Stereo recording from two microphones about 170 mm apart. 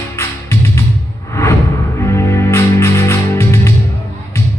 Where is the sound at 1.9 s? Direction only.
15° left (ahead or behind).